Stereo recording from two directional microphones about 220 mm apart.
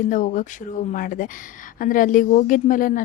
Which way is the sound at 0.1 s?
35° left (ahead or behind).